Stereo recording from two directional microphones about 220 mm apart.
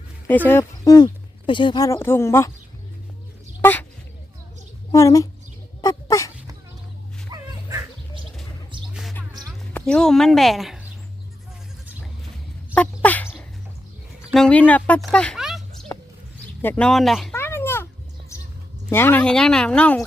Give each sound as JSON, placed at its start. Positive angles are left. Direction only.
{"t": 0.3, "sound": "speech", "side_deg": 10}
{"t": 3.6, "sound": "speech", "side_deg": 10}
{"t": 4.9, "sound": "a woman's voice", "side_deg": 15}
{"t": 5.8, "sound": "dog", "side_deg": 15}
{"t": 7.3, "sound": "music", "side_deg": -20}
{"t": 8.9, "sound": "music", "side_deg": 0}
{"t": 9.5, "sound": "speech", "side_deg": 5}
{"t": 12.7, "sound": "dog", "side_deg": 5}
{"t": 14.3, "sound": "speech", "side_deg": 5}
{"t": 16.6, "sound": "a sound", "side_deg": 5}
{"t": 18.9, "sound": "speech", "side_deg": 10}